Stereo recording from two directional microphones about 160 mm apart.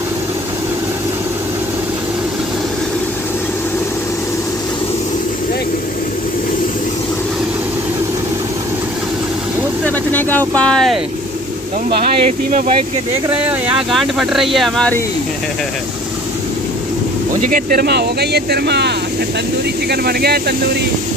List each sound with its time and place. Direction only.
9.8 s vehicle: 10° left (ahead or behind)
12.0 s speech: 50° right (ahead or behind)
13.3 s speech: 10° right (ahead or behind)
17.5 s speech: 60° right (ahead or behind)